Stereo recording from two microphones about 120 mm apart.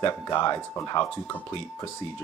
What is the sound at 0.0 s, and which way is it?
Speech, 35° left (ahead or behind).